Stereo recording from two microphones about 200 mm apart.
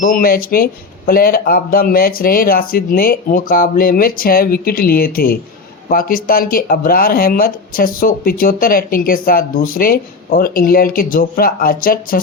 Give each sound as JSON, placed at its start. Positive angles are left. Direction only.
{"t": 0.0, "sound": "speech", "side_deg": 45}